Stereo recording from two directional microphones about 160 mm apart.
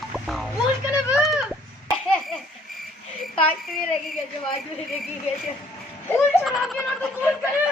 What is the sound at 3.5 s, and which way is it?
Speech, centre (ahead or behind).